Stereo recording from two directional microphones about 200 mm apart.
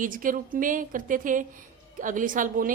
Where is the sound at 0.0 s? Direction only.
40° right (ahead or behind).